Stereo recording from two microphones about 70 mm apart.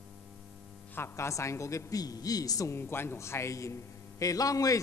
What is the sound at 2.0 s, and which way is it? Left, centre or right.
Speech, left.